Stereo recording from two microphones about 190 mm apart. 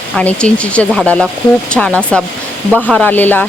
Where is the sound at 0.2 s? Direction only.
5° left (ahead or behind).